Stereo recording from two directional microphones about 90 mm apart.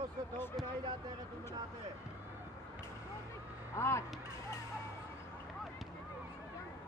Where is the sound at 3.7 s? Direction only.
30° left (ahead or behind).